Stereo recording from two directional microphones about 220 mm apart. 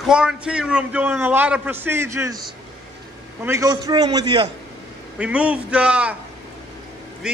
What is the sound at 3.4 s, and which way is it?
A man's voice, 15° right (ahead or behind).